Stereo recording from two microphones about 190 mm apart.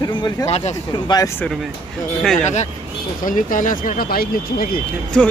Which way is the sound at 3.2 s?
45° left (ahead or behind).